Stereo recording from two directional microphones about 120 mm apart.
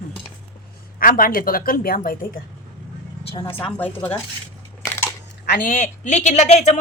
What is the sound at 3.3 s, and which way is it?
Speech, 45° left (ahead or behind).